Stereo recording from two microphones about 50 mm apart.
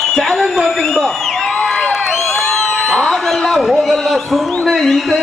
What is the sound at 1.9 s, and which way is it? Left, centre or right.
Crowd, centre.